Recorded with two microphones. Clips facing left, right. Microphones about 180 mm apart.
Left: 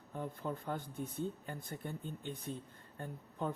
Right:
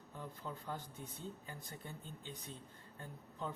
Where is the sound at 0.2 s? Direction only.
55° left (ahead or behind).